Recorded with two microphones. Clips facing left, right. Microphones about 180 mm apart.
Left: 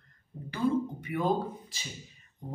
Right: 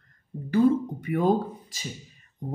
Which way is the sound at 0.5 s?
45° right (ahead or behind).